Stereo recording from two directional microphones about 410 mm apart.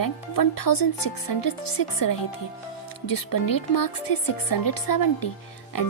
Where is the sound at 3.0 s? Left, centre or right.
Left.